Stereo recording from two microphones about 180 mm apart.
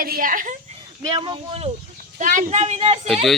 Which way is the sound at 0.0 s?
50° right (ahead or behind).